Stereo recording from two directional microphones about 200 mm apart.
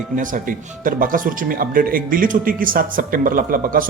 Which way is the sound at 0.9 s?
45° right (ahead or behind).